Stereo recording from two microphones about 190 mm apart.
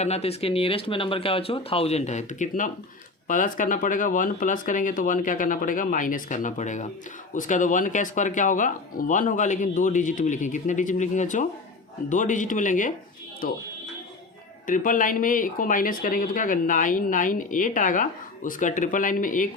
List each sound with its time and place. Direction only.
0.0 s speech: 35° left (ahead or behind); by 13.6 s 50° left (ahead or behind)
14.7 s speech: 45° left (ahead or behind)